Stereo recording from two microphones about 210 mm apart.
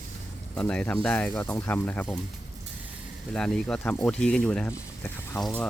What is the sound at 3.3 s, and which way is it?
Speech, 5° left (ahead or behind).